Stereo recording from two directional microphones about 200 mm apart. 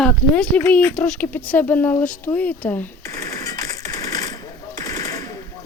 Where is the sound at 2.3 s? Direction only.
5° left (ahead or behind).